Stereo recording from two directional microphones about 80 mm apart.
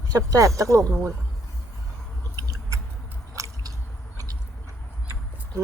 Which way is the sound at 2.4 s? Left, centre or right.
Right.